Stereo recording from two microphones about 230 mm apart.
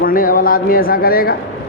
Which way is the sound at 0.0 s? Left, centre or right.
Left.